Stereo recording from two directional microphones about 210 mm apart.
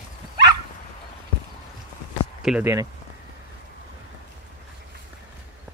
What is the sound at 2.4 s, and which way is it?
Speech, 5° right (ahead or behind).